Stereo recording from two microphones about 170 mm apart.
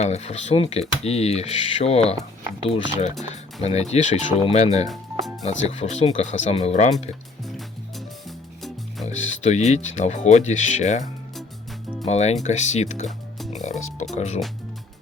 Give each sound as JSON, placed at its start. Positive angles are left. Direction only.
{"t": 0.0, "sound": "speech", "side_deg": 40}
{"t": 7.4, "sound": "music", "side_deg": 0}
{"t": 9.0, "sound": "speech", "side_deg": 40}
{"t": 12.0, "sound": "speech", "side_deg": 40}